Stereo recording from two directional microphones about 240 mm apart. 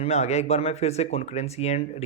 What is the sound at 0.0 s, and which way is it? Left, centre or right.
Speech, left.